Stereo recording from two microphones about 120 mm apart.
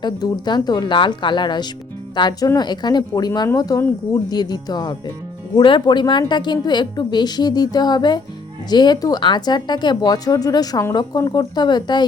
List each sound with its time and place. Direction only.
0.0 s a woman's voice: 40° left (ahead or behind)